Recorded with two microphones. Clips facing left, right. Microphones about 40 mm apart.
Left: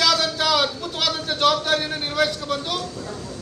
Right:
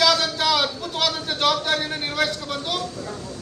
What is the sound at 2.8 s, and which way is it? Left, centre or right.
Speech, right.